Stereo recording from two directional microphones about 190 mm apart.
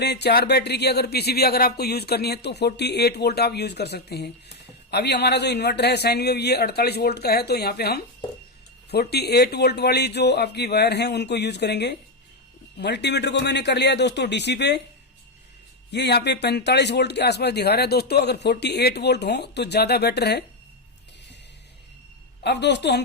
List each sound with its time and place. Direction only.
0.0 s a man's voice: 60° left (ahead or behind)
15.9 s a man's voice: 60° left (ahead or behind)
22.4 s a man's voice: 65° left (ahead or behind)